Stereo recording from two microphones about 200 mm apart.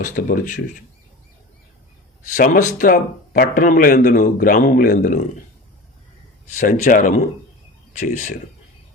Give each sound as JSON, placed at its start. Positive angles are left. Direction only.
{"t": 0.0, "sound": "speech", "side_deg": 45}
{"t": 2.3, "sound": "a man's voice", "side_deg": 40}
{"t": 6.6, "sound": "speech", "side_deg": 40}